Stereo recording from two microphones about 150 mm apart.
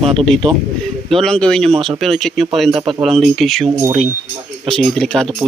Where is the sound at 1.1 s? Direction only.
5° left (ahead or behind).